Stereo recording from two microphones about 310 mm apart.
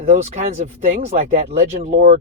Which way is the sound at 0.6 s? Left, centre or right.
Right.